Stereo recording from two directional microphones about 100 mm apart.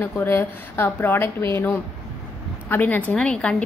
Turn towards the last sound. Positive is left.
turn(degrees=10)  # may be behind; listen again after turning